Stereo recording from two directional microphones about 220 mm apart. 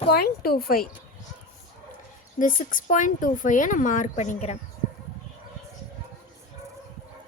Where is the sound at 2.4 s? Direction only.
35° left (ahead or behind).